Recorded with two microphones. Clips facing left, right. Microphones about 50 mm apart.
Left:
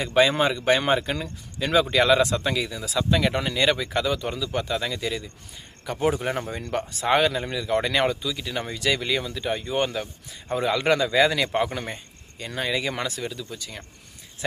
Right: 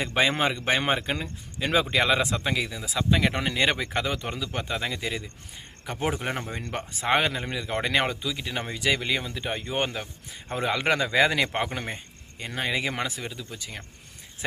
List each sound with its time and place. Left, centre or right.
0.0 s speech: right